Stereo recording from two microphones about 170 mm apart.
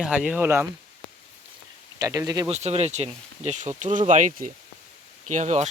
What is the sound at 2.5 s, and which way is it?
Speech, 40° right (ahead or behind).